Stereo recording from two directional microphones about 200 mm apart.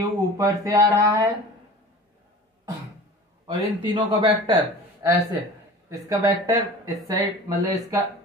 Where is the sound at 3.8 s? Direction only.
20° right (ahead or behind).